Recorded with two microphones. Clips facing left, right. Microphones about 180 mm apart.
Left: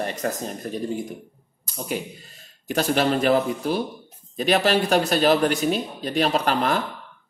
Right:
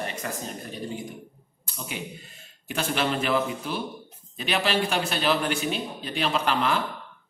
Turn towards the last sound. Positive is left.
turn(degrees=40)  # may be behind; listen again after turning